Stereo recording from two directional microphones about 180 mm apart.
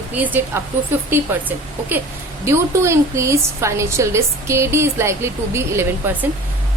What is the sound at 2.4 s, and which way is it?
Speech, 15° right (ahead or behind).